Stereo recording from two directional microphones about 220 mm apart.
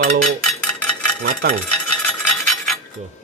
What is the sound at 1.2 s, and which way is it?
Speech, 35° right (ahead or behind).